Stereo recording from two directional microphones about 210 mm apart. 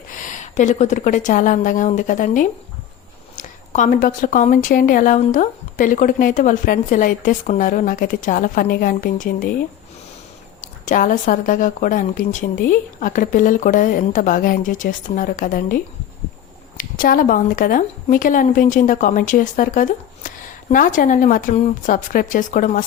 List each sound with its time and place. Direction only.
0.1 s a woman's voice: 40° left (ahead or behind)
10.8 s a woman's voice: 40° left (ahead or behind)